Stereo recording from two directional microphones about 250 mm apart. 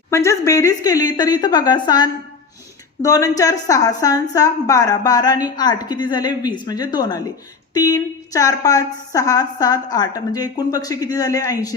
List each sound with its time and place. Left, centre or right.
0.1 s a woman's voice: centre